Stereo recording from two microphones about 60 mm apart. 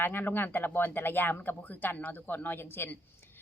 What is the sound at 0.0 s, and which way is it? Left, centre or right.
Speech, left.